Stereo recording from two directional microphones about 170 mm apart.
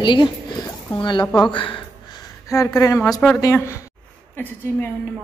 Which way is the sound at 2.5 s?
20° left (ahead or behind).